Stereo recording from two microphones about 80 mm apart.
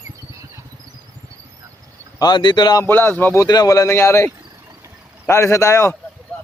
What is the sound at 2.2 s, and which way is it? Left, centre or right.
Speech, left.